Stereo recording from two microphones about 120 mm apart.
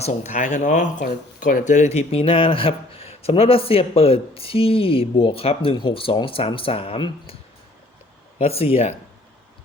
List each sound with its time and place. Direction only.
0.0 s speech: 80° left; by 7.3 s 50° left (ahead or behind)
8.4 s speech: 55° left (ahead or behind)